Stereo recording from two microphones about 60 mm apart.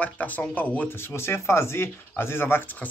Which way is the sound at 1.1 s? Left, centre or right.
Left.